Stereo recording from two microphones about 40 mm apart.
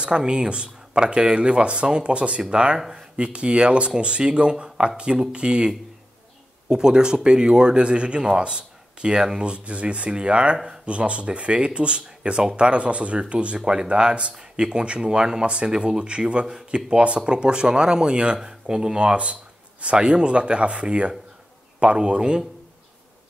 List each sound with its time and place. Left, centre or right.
0.0 s speech: right
4.6 s a man's voice: centre
6.7 s speech: centre
13.6 s speech: centre